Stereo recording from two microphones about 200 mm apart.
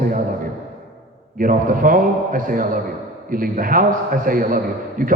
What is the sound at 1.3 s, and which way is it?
A man's voice, 45° right (ahead or behind).